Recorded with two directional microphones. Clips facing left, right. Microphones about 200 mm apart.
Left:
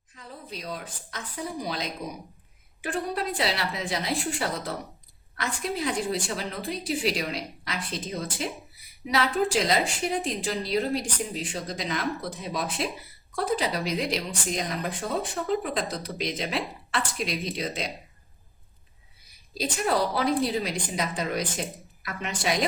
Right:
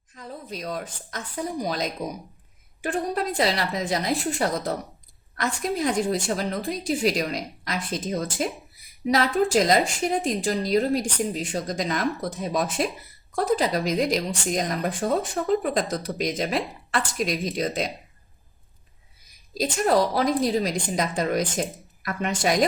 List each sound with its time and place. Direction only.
0.2 s a woman's voice: 45° right (ahead or behind)
19.5 s a woman's voice: 45° right (ahead or behind)